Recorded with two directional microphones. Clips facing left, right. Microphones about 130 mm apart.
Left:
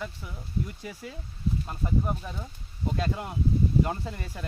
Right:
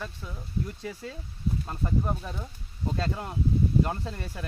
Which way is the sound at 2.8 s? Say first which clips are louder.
Left 1 dB; 15° left (ahead or behind).